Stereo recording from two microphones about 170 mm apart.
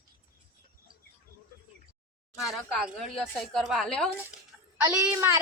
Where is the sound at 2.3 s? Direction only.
Centre (ahead or behind).